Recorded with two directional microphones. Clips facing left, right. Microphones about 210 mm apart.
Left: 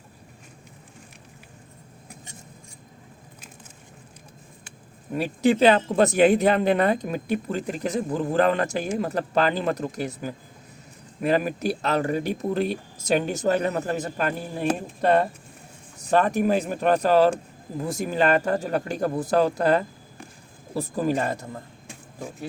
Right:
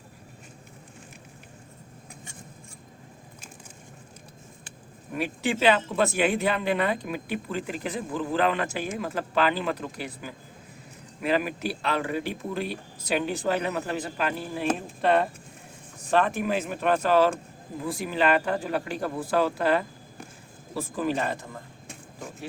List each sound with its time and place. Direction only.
5.1 s speech: 40° left (ahead or behind)